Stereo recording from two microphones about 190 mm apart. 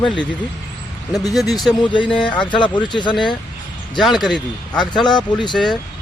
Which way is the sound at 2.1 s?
5° left (ahead or behind).